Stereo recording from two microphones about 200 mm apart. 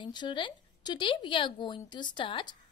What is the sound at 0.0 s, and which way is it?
A woman's voice, 20° left (ahead or behind).